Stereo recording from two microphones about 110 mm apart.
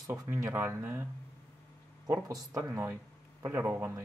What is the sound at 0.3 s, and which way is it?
Speech, 25° right (ahead or behind).